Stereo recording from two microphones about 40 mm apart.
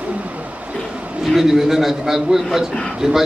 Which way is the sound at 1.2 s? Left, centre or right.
Centre.